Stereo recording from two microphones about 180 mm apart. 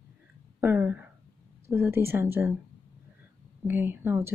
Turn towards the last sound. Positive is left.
turn(degrees=-10)  # may be behind; listen again after turning